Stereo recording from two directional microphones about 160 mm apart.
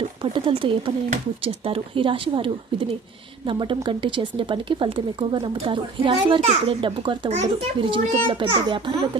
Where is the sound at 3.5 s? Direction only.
30° right (ahead or behind).